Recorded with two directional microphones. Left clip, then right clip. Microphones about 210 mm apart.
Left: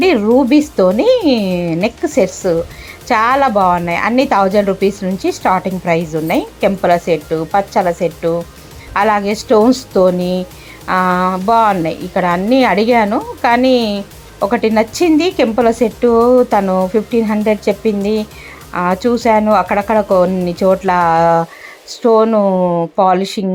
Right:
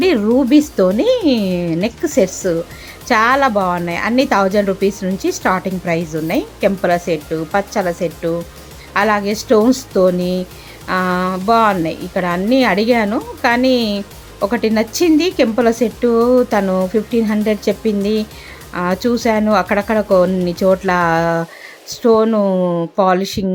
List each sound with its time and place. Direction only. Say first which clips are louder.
0.0 s a woman's voice: left 3 dB; 10° right (ahead or behind)